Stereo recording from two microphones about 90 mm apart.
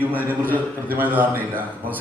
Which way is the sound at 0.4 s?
20° right (ahead or behind).